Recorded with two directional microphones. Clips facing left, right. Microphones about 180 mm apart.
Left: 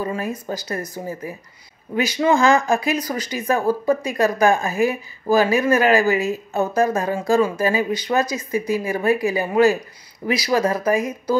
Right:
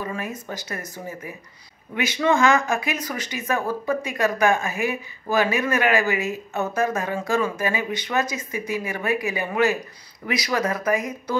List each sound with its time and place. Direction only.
0.0 s speech: 35° left (ahead or behind)